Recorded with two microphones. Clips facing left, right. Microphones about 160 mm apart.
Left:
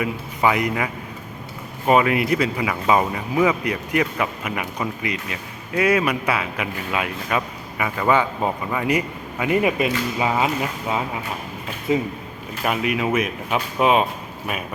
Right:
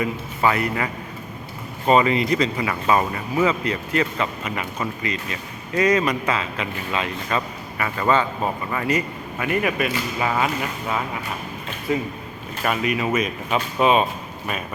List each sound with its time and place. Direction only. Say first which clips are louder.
0.0 s speech: left 1 dB; 15° left (ahead or behind)
1.9 s speech: even; 10° left (ahead or behind)